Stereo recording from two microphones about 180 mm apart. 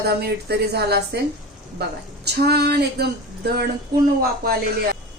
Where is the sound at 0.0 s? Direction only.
60° right (ahead or behind).